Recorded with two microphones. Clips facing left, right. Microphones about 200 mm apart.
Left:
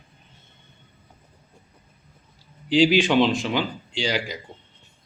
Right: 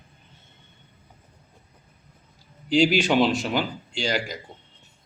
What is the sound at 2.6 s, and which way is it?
Speech, 45° right (ahead or behind).